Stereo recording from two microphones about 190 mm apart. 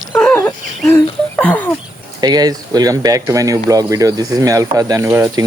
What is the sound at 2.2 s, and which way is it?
Speech, 20° right (ahead or behind).